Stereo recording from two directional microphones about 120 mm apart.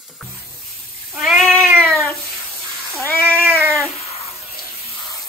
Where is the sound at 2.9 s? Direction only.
20° left (ahead or behind).